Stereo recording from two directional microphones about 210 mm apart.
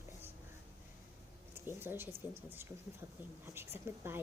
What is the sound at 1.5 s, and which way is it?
Speech, 10° right (ahead or behind).